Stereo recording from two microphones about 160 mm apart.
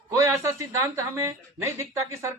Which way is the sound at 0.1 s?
20° right (ahead or behind).